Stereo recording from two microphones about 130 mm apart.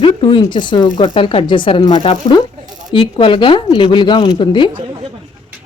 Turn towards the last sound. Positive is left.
turn(degrees=35)  # may be behind; listen again after turning